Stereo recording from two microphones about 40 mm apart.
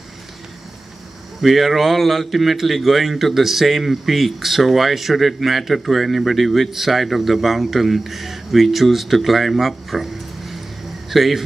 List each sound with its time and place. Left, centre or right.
1.4 s a man's voice: centre